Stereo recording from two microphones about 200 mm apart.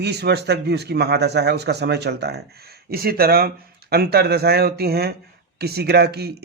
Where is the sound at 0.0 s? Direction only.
55° right (ahead or behind).